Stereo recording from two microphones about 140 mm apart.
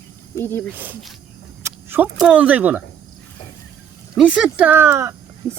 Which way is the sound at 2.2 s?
5° right (ahead or behind).